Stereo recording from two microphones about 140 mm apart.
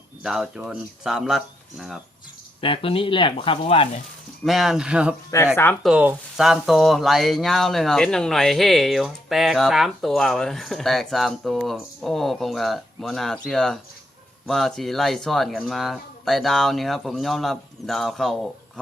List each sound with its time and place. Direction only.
0.2 s speech: 5° right (ahead or behind)
2.6 s speech: 40° left (ahead or behind)
4.4 s speech: centre (ahead or behind)
5.3 s speech: 20° left (ahead or behind)
5.8 s speech: 10° right (ahead or behind)